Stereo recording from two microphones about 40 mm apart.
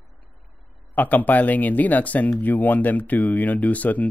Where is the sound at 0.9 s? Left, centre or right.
Left.